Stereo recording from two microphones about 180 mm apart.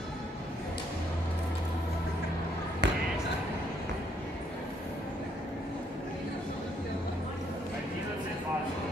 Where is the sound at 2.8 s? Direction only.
75° right (ahead or behind).